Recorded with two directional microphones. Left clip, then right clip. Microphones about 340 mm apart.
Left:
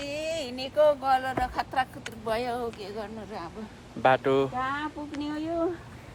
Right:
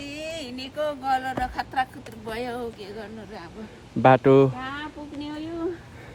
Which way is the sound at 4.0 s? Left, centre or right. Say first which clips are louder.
Right 6 dB; right.